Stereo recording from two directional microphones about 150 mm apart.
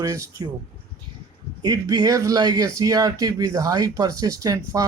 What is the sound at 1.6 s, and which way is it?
Speech, 25° right (ahead or behind).